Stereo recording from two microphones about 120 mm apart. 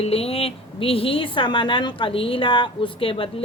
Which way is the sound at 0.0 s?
55° left (ahead or behind).